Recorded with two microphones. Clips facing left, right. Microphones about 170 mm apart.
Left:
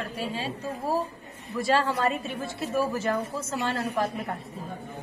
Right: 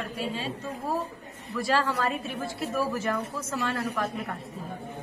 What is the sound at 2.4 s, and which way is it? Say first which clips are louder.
A woman's voice: left 2 dB; 25° left (ahead or behind).